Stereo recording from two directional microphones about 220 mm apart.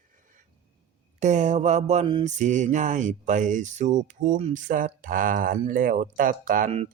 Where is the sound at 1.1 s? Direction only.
35° right (ahead or behind).